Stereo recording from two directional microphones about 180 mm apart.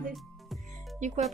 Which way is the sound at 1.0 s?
40° right (ahead or behind).